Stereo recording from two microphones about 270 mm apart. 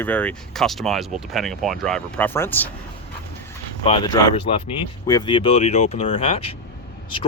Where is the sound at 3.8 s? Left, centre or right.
Centre.